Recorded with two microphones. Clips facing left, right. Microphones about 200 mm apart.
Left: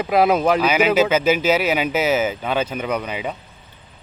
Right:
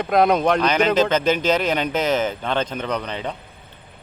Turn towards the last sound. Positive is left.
turn(degrees=10)  # may be behind; listen again after turning